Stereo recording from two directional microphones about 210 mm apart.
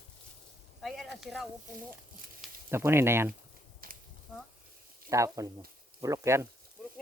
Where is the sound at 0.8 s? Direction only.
Centre (ahead or behind).